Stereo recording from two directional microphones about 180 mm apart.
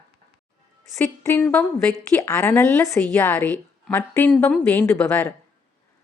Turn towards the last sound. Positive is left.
turn(degrees=10)  # may be behind; listen again after turning